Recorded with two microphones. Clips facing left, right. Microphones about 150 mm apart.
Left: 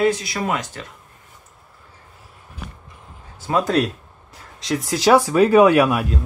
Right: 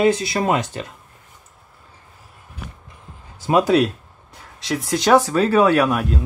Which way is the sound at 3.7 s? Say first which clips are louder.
Right 2 dB; centre (ahead or behind).